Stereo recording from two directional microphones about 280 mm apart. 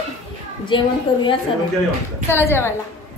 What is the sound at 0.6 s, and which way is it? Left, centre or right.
A woman's voice, centre.